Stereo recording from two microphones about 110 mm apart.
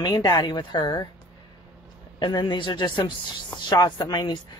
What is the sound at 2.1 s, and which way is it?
Speech, 40° left (ahead or behind).